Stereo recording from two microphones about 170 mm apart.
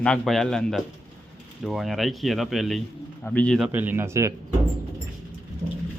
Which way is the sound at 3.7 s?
10° right (ahead or behind).